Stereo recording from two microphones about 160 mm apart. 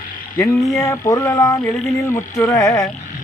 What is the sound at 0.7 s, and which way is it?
Speech, 20° left (ahead or behind).